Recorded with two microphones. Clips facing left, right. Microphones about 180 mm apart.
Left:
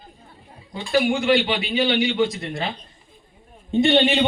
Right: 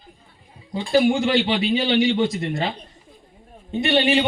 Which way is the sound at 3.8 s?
25° left (ahead or behind).